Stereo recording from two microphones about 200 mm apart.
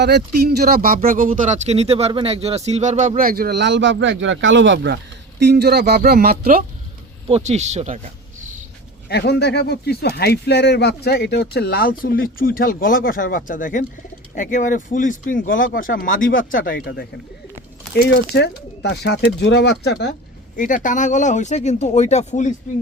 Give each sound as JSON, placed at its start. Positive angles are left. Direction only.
{"t": 0.0, "sound": "speech", "side_deg": -55}
{"t": 7.3, "sound": "speech", "side_deg": -30}
{"t": 9.0, "sound": "speech", "side_deg": 55}
{"t": 17.9, "sound": "speech", "side_deg": 55}
{"t": 20.6, "sound": "speech", "side_deg": 40}